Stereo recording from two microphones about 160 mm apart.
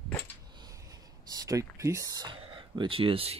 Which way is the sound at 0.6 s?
25° right (ahead or behind).